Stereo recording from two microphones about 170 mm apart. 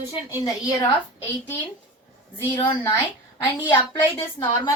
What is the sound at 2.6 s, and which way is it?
Speech, 30° left (ahead or behind).